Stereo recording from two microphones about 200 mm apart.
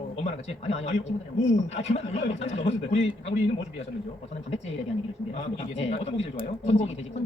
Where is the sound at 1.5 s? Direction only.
35° left (ahead or behind).